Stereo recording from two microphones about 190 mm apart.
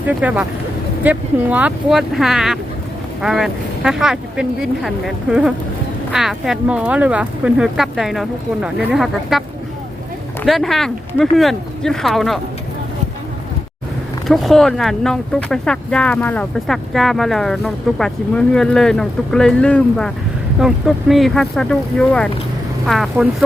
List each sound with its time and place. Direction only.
0.2 s speech: 5° right (ahead or behind)
10.4 s speech: centre (ahead or behind)
14.3 s speech: centre (ahead or behind)